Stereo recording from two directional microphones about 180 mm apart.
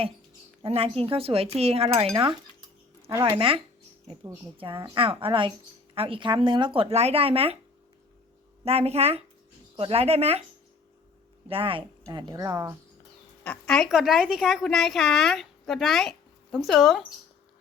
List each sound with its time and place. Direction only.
0.6 s speech: 35° right (ahead or behind)
3.1 s speech: 15° right (ahead or behind)
3.3 s a woman's voice: 30° right (ahead or behind)
8.6 s speech: 35° right (ahead or behind)
11.4 s a woman's voice: 30° right (ahead or behind)
13.4 s a woman's voice: 5° left (ahead or behind)